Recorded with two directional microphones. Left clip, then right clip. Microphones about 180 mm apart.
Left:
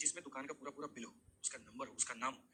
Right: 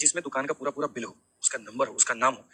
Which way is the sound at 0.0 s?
30° right (ahead or behind).